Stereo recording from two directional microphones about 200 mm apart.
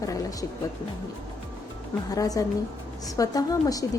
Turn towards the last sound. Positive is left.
turn(degrees=15)  # may be behind; listen again after turning